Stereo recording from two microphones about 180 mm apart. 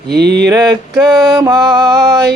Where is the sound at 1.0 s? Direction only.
20° right (ahead or behind).